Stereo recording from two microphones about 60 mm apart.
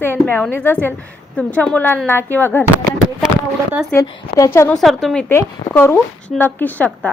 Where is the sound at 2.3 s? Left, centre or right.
Left.